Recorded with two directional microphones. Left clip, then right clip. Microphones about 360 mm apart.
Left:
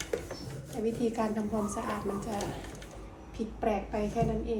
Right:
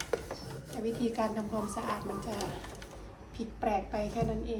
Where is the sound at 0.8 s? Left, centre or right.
Centre.